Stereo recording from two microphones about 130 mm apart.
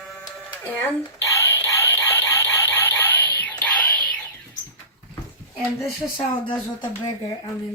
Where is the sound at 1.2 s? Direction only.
20° left (ahead or behind).